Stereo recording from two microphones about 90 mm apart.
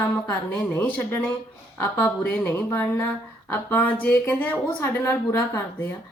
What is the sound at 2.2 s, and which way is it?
Speech, 25° left (ahead or behind).